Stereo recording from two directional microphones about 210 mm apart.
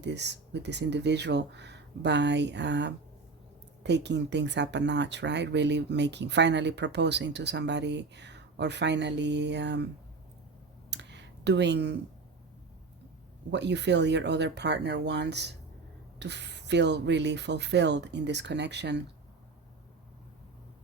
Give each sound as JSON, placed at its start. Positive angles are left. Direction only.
{"t": 0.0, "sound": "speech", "side_deg": -55}
{"t": 10.9, "sound": "a sound", "side_deg": -55}
{"t": 13.5, "sound": "speech", "side_deg": -55}